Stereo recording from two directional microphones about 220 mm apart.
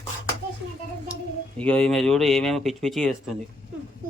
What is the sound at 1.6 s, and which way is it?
Speech, 5° left (ahead or behind).